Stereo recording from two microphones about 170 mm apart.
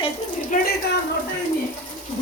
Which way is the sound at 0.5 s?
50° left (ahead or behind).